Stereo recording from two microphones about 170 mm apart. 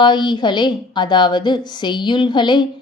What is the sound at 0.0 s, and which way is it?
A woman's voice, 25° left (ahead or behind).